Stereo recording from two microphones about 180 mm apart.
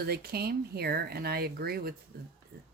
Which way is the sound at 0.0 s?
60° right (ahead or behind).